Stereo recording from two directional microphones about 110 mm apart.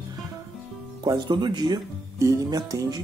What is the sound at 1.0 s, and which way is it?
Speech, 40° right (ahead or behind).